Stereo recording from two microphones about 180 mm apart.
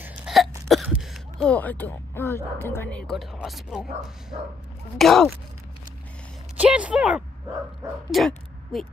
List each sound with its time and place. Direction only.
0.0 s speech: 5° right (ahead or behind)
6.5 s speech: 5° right (ahead or behind)